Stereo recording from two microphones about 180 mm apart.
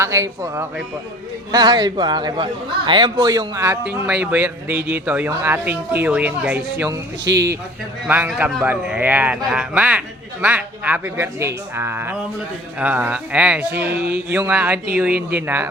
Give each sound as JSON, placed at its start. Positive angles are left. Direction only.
{"t": 0.0, "sound": "a man's voice", "side_deg": -15}